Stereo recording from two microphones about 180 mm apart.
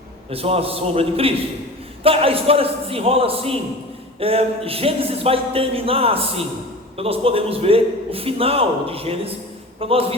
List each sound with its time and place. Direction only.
0.3 s a man's voice: 35° right (ahead or behind)